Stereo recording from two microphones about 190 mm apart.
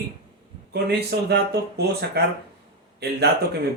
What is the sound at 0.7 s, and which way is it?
Speech, 60° right (ahead or behind).